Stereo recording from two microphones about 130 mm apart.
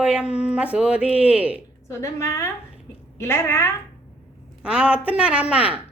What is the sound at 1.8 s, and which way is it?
A woman's voice, 25° left (ahead or behind).